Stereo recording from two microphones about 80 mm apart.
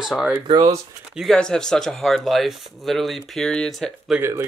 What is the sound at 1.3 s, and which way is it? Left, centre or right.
Speech, centre.